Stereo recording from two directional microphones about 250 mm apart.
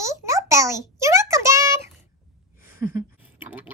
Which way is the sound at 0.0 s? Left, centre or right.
Centre.